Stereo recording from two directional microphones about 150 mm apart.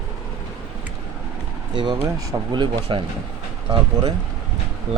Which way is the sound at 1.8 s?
30° right (ahead or behind).